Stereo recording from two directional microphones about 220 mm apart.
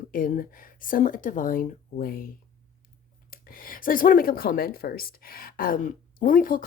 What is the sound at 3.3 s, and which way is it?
Speech, 40° left (ahead or behind).